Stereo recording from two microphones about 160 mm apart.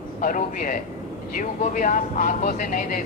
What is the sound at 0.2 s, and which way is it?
Speech, 55° left (ahead or behind).